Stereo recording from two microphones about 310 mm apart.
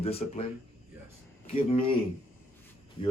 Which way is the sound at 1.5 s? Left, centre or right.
Centre.